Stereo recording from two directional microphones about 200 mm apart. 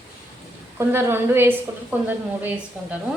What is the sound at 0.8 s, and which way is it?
A woman's voice, 15° right (ahead or behind).